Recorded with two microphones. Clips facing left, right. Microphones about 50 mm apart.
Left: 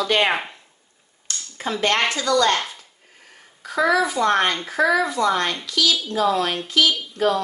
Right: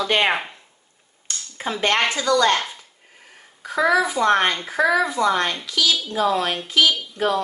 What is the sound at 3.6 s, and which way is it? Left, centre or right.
A child's voice, centre.